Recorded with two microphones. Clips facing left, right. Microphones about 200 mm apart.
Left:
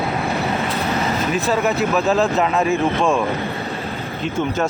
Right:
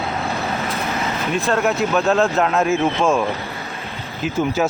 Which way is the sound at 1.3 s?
Centre (ahead or behind).